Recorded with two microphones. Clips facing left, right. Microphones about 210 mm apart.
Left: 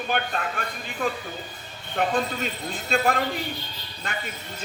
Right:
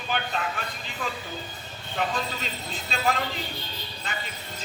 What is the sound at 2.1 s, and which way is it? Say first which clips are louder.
Speech: left 5 dB; 55° left (ahead or behind).